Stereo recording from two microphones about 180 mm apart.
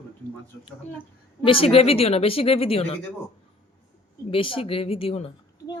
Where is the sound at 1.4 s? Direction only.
30° left (ahead or behind).